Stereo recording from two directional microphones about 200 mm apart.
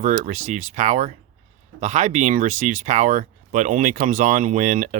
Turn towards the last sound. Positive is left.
turn(degrees=-40)  # may be behind; listen again after turning